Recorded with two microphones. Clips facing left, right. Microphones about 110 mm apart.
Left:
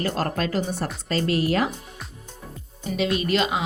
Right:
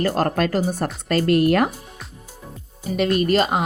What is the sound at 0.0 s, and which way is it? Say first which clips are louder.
A woman's voice: right 5 dB; 45° right (ahead or behind).